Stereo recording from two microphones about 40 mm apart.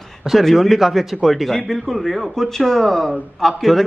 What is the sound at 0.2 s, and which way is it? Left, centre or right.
A man's voice, centre.